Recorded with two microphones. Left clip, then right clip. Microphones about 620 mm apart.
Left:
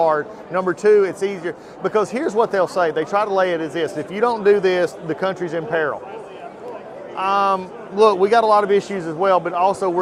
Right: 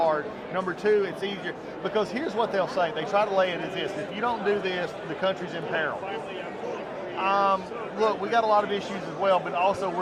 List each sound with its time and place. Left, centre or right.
0.0 s a man's voice: left
7.2 s a man's voice: left